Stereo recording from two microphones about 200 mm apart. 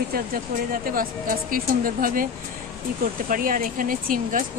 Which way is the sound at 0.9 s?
45° right (ahead or behind).